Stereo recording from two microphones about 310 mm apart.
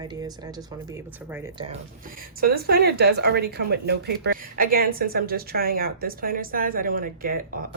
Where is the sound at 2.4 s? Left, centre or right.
Right.